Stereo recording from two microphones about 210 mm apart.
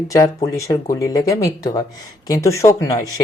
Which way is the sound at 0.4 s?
15° left (ahead or behind).